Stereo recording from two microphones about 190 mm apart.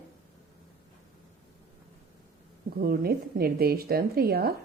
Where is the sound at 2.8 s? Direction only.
50° right (ahead or behind).